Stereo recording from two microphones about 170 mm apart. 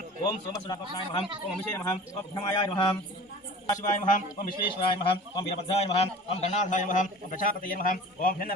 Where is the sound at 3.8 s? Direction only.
45° left (ahead or behind).